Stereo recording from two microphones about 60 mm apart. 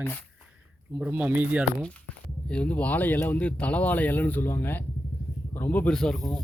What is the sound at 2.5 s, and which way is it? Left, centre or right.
Speech, left.